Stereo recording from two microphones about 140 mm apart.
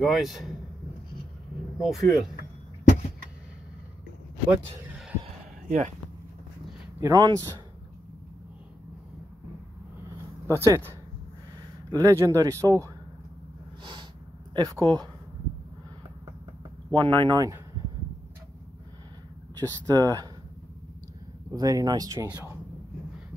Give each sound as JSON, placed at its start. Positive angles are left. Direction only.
{"t": 0.0, "sound": "speech", "side_deg": 0}
{"t": 1.8, "sound": "speech", "side_deg": 0}
{"t": 5.7, "sound": "speech", "side_deg": -60}
{"t": 7.0, "sound": "speech", "side_deg": -30}
{"t": 10.4, "sound": "speech", "side_deg": -20}
{"t": 11.9, "sound": "speech", "side_deg": -25}
{"t": 14.5, "sound": "speech", "side_deg": -30}
{"t": 16.9, "sound": "speech", "side_deg": -35}
{"t": 19.5, "sound": "speech", "side_deg": -25}
{"t": 21.5, "sound": "speech", "side_deg": -25}